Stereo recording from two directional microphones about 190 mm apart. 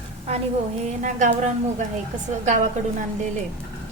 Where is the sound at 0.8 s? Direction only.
40° right (ahead or behind).